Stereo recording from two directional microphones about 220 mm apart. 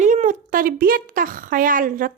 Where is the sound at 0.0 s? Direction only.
35° right (ahead or behind).